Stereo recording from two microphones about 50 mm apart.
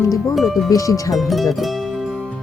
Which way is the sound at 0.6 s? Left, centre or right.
Left.